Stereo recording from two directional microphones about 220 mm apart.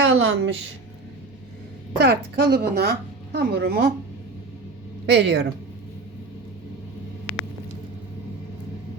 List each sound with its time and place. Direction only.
0.0 s a woman's voice: 55° right (ahead or behind)
2.0 s a woman's voice: 50° right (ahead or behind)
5.0 s a woman's voice: 50° right (ahead or behind)